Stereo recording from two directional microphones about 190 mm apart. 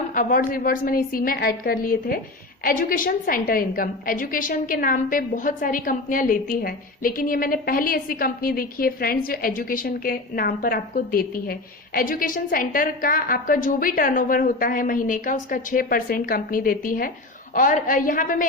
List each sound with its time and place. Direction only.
0.1 s a woman's voice: 45° left (ahead or behind)